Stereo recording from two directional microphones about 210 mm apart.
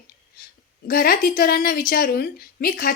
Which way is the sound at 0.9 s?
45° left (ahead or behind).